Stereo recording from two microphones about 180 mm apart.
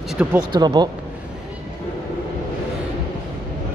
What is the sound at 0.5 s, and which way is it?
Speech, 20° right (ahead or behind).